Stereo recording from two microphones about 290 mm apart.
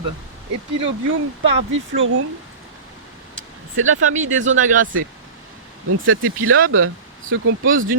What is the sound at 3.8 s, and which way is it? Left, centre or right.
Speech, right.